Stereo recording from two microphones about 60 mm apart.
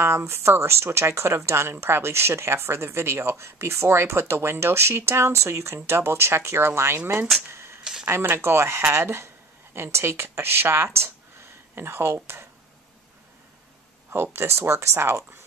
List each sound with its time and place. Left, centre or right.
0.2 s speech: right
7.5 s a sound: right
8.1 s speech: right
14.1 s speech: right